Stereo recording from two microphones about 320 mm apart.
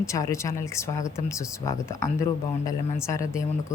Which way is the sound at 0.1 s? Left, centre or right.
Centre.